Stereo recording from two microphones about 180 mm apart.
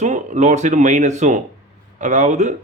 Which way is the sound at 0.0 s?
40° right (ahead or behind).